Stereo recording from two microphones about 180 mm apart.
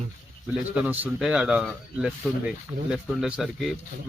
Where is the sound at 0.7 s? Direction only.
10° right (ahead or behind).